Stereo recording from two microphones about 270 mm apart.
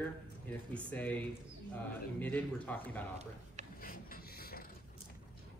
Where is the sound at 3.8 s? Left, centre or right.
Left.